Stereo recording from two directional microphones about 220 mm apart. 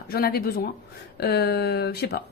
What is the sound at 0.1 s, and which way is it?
Speech, 45° left (ahead or behind).